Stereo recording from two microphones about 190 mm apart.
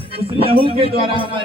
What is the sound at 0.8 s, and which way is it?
Speech, 25° right (ahead or behind).